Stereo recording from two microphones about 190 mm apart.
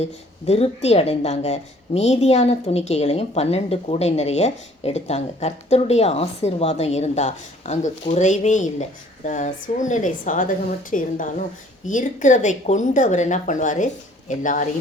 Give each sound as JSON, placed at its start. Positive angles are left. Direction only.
{"t": 0.0, "sound": "a woman's voice", "side_deg": 35}